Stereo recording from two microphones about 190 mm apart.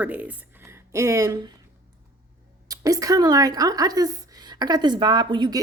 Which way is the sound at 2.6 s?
20° right (ahead or behind).